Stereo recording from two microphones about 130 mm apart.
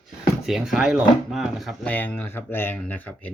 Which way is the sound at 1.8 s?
10° left (ahead or behind).